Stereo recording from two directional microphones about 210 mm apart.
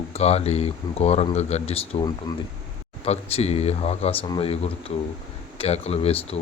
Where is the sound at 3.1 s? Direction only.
30° left (ahead or behind).